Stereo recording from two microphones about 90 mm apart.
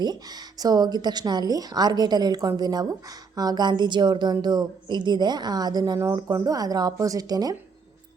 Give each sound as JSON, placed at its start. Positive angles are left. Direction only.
{"t": 0.0, "sound": "a woman's voice", "side_deg": -50}